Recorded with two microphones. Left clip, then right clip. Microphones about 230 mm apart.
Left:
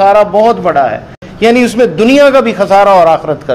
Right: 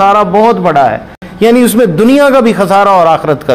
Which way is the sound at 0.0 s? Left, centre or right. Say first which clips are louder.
Even; right.